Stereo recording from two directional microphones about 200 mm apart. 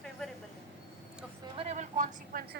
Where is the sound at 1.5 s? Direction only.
35° right (ahead or behind).